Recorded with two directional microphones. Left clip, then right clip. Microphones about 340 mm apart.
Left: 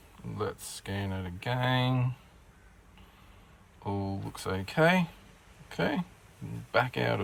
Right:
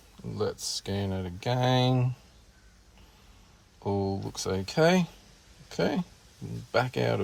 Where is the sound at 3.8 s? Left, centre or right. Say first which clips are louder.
Right 6 dB; centre.